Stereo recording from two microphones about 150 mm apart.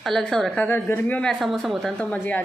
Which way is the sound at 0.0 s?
5° left (ahead or behind).